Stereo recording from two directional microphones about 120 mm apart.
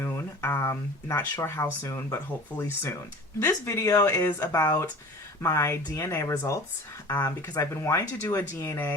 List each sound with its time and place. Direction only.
0.0 s speech: 20° left (ahead or behind)